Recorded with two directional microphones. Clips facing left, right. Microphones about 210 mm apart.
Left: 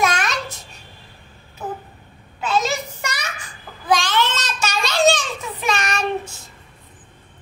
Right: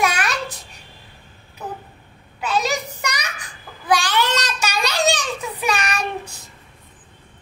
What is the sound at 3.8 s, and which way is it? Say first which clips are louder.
Babbling: even; 10° right (ahead or behind).